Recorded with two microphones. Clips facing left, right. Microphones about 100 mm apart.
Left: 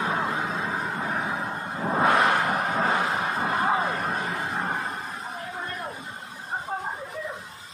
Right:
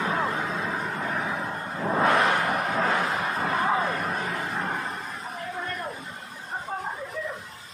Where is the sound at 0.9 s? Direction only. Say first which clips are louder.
Left 1 dB; 20° left (ahead or behind).